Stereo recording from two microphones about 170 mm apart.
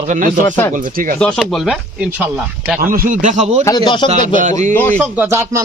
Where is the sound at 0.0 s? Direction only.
50° right (ahead or behind).